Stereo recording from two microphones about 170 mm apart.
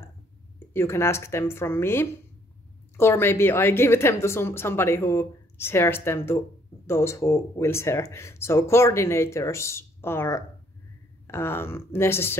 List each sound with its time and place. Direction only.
0.7 s speech: 15° left (ahead or behind)